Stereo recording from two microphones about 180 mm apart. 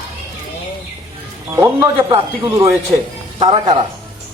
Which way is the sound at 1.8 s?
20° right (ahead or behind).